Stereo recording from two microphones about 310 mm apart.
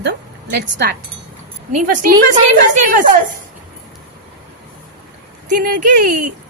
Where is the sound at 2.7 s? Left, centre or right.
Right.